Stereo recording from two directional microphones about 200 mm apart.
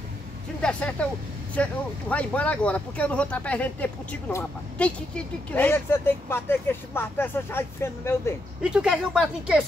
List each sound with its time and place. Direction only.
0.6 s speech: 5° left (ahead or behind)
8.6 s speech: 5° right (ahead or behind)